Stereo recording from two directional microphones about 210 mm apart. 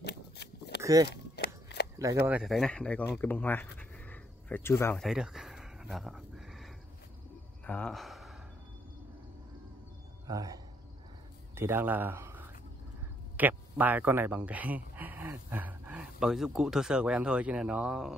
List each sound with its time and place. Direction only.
0.0 s a sound: 50° left (ahead or behind)
0.8 s speech: 15° right (ahead or behind)
1.1 s walk: 50° left (ahead or behind)
2.0 s speech: 10° right (ahead or behind); by 5.0 s 10° left (ahead or behind)
5.0 s a sound: centre (ahead or behind)
7.6 s gasp: 5° left (ahead or behind)
10.2 s speech: 15° right (ahead or behind)